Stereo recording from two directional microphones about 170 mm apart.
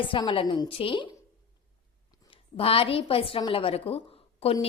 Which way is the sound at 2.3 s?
35° left (ahead or behind).